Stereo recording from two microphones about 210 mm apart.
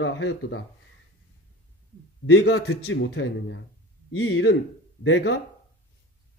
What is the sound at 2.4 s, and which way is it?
Speech, 70° left (ahead or behind).